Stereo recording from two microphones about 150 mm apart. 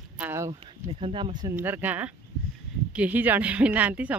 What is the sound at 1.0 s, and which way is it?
Speech, 35° right (ahead or behind).